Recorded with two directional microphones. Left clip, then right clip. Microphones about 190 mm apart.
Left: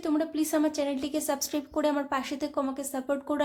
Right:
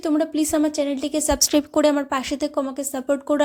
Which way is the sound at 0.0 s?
35° right (ahead or behind).